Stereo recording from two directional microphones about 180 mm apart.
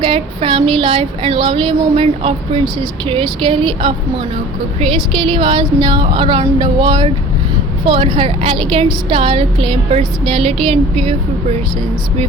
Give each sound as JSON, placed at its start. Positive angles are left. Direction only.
{"t": 0.0, "sound": "speech", "side_deg": -30}
{"t": 5.4, "sound": "speech", "side_deg": -25}